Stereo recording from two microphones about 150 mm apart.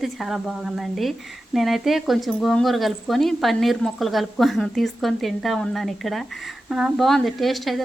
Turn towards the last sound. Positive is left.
turn(degrees=0)  # may be behind; listen again after turning